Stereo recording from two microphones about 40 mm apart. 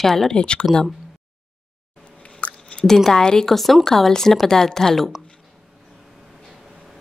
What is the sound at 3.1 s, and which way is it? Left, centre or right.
Speech, centre.